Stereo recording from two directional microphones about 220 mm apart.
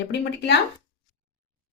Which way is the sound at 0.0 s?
50° left (ahead or behind).